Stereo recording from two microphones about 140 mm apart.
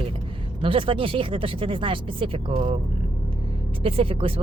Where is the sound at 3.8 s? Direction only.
40° right (ahead or behind).